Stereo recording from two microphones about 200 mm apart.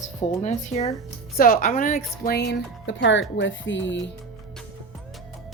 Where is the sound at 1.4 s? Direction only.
45° left (ahead or behind).